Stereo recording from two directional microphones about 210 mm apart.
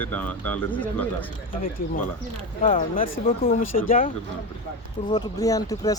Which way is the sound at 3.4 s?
40° left (ahead or behind).